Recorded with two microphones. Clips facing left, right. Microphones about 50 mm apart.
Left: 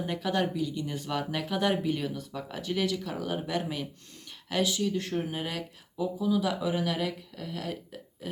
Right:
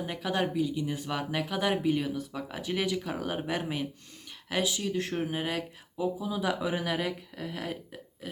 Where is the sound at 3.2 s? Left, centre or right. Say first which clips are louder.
Left 1 dB; right.